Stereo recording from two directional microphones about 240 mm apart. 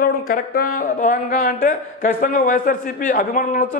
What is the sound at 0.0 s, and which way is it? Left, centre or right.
Speech, left.